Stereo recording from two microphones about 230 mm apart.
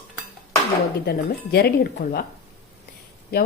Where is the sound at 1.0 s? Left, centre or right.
Left.